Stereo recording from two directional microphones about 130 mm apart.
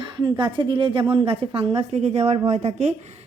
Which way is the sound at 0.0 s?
35° right (ahead or behind).